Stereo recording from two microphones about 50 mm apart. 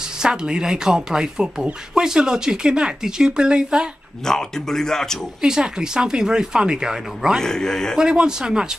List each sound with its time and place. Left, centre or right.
0.2 s speech: centre
4.3 s speech: centre
5.4 s speech: centre
7.3 s speech: centre
8.0 s speech: centre